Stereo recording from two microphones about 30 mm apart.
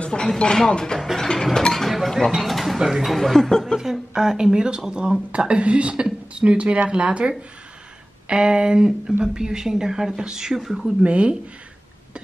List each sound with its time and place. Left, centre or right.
0.1 s speech: left
1.1 s a sound: centre
2.4 s speech: centre
2.8 s speech: centre
3.1 s a sound: centre
3.7 s speech: centre
10.5 s speech: centre
11.1 s speech: right